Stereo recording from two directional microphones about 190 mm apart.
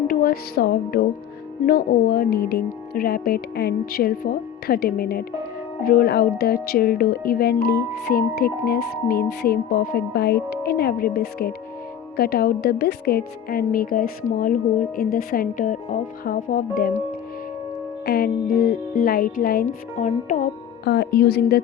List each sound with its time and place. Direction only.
0.1 s music: 50° left (ahead or behind)
1.6 s speech: 50° left (ahead or behind)
18.0 s speech: 55° left (ahead or behind)
19.6 s speech: 40° left (ahead or behind)
20.9 s a woman's voice: 55° left (ahead or behind)